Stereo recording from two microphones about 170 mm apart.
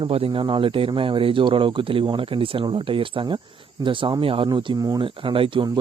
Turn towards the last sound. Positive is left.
turn(degrees=-30)  # may be behind; listen again after turning